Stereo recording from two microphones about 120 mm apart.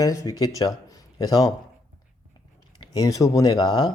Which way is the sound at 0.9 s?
30° left (ahead or behind).